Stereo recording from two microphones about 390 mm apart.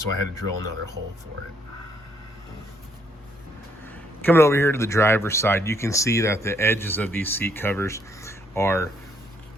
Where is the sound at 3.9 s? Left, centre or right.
Centre.